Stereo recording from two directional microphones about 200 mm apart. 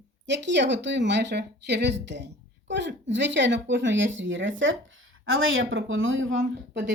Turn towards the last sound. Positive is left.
turn(degrees=-65)  # may be behind; listen again after turning